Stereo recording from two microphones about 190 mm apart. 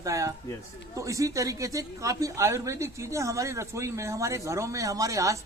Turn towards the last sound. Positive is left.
turn(degrees=-15)  # may be behind; listen again after turning